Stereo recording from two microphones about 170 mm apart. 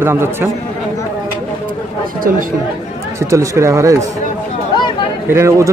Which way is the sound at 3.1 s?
20° right (ahead or behind).